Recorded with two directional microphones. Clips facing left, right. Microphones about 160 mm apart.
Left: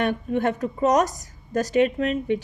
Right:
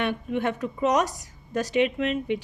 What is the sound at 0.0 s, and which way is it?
A woman's voice, 45° left (ahead or behind).